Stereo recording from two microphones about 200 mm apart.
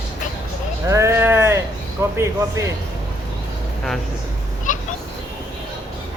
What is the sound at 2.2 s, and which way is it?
Speech, 15° right (ahead or behind).